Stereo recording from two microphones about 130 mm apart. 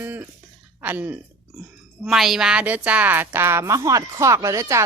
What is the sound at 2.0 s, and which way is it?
A woman's voice, centre (ahead or behind).